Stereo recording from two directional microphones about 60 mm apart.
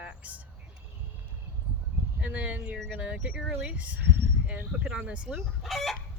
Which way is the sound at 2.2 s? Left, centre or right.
Right.